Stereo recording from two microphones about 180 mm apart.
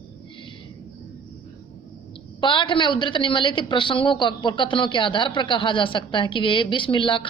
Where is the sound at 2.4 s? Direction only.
25° left (ahead or behind).